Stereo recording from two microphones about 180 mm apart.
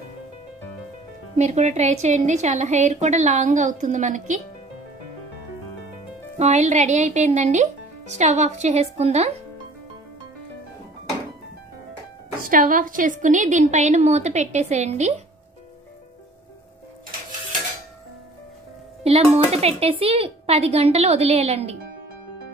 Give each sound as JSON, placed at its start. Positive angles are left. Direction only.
{"t": 1.3, "sound": "a woman's voice", "side_deg": -40}
{"t": 6.3, "sound": "a woman's voice", "side_deg": -40}
{"t": 12.4, "sound": "a woman's voice", "side_deg": -50}
{"t": 19.0, "sound": "a woman's voice", "side_deg": -35}